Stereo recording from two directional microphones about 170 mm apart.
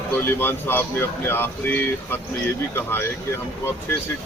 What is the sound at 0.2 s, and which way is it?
Speech, 15° left (ahead or behind).